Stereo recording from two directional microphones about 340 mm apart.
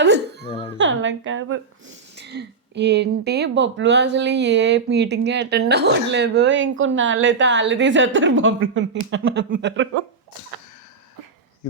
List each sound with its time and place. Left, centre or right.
0.0 s music: right
0.4 s music: centre
0.8 s speech: right